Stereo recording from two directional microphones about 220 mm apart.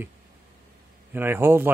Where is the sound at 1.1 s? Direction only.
10° right (ahead or behind).